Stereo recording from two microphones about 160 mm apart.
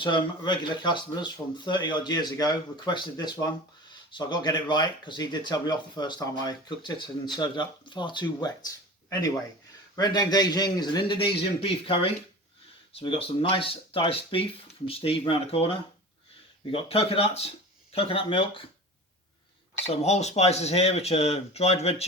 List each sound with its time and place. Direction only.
0.0 s speech: 30° left (ahead or behind)
9.9 s speech: 25° left (ahead or behind)
19.8 s speech: 40° left (ahead or behind)